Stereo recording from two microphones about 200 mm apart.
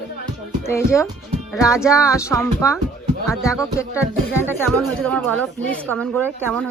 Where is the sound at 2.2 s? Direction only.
15° left (ahead or behind).